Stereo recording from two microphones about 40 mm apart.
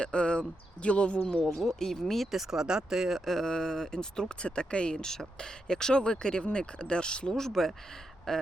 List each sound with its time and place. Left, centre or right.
0.0 s speech: left
1.2 s speech: centre
1.5 s speech: centre
2.3 s speech: centre
3.2 s speech: centre
4.4 s speech: left
7.3 s speech: centre